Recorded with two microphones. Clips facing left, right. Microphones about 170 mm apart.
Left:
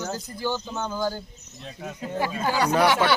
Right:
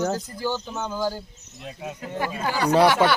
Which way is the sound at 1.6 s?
15° right (ahead or behind).